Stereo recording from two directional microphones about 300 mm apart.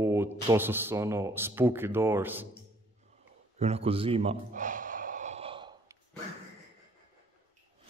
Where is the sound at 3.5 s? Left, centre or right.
Right.